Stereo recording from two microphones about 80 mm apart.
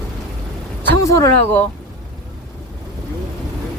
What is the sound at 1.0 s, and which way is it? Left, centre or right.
Speech, left.